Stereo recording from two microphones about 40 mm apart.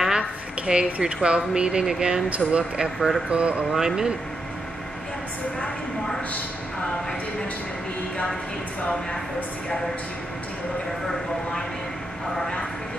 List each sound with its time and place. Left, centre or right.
0.7 s speech: right
2.2 s speech: right
2.8 s speech: centre
3.3 s speech: right
3.7 s speech: centre